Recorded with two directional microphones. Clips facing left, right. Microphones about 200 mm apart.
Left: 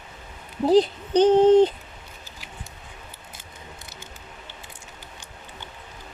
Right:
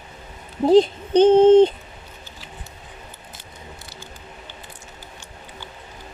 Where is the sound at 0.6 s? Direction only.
25° right (ahead or behind).